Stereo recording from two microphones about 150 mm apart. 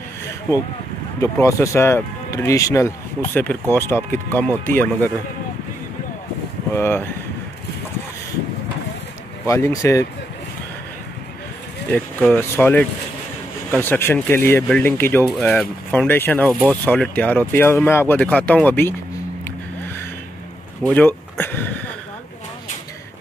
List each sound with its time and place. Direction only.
1.2 s speech: 20° left (ahead or behind)
6.7 s speech: 15° left (ahead or behind)
9.5 s speech: 20° left (ahead or behind)
11.9 s speech: 15° left (ahead or behind)
20.8 s a sound: 10° left (ahead or behind)